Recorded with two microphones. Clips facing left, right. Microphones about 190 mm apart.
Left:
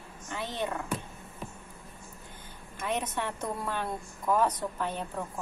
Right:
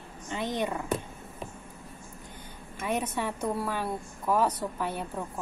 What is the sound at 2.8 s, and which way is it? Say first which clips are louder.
A woman's voice: right 2 dB; 10° right (ahead or behind).